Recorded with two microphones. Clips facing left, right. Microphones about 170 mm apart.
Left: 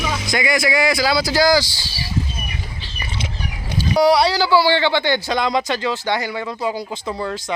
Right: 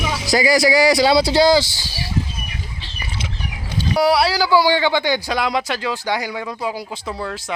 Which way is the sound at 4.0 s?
5° right (ahead or behind).